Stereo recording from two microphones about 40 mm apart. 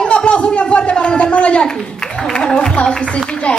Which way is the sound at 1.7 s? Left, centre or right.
Centre.